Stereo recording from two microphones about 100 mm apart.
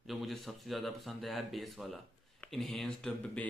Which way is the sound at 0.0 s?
Centre (ahead or behind).